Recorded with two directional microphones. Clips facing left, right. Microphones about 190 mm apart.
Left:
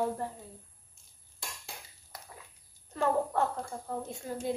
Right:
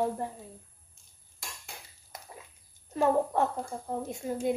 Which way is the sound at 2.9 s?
15° right (ahead or behind).